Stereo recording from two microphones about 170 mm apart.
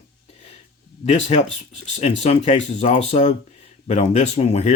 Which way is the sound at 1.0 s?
40° left (ahead or behind).